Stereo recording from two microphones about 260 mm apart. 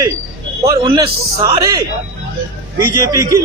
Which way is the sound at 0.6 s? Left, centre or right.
Centre.